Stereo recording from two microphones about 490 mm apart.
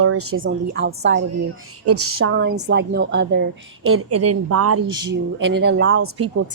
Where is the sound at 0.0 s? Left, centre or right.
Right.